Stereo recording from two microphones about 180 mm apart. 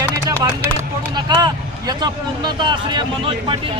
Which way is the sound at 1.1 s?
20° right (ahead or behind).